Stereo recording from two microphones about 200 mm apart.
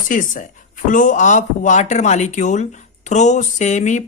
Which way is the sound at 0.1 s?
40° left (ahead or behind).